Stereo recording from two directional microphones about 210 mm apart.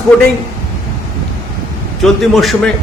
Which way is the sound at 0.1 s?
5° left (ahead or behind).